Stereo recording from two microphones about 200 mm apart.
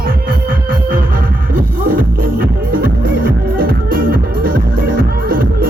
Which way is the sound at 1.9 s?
45° right (ahead or behind).